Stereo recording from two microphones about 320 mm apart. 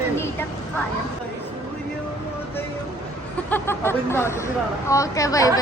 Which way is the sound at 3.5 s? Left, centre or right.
Centre.